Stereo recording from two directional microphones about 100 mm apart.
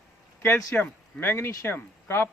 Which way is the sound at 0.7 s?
20° left (ahead or behind).